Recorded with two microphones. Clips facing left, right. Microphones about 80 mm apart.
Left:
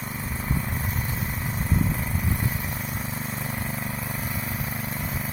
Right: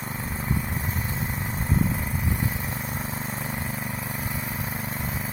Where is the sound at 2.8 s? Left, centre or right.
Right.